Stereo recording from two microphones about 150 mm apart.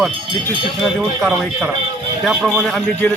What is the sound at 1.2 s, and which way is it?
A man's voice, centre (ahead or behind).